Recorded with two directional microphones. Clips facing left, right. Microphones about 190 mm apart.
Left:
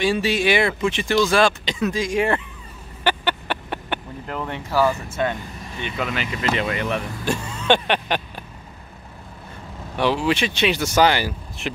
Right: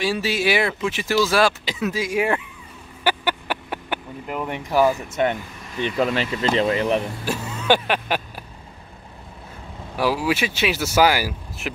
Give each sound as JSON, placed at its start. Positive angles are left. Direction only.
{"t": 0.0, "sound": "speech", "side_deg": -5}
{"t": 3.0, "sound": "a sound", "side_deg": -10}
{"t": 5.1, "sound": "speech", "side_deg": -20}
{"t": 5.8, "sound": "speech", "side_deg": -35}
{"t": 7.2, "sound": "vehicle", "side_deg": -5}
{"t": 9.9, "sound": "speech", "side_deg": -5}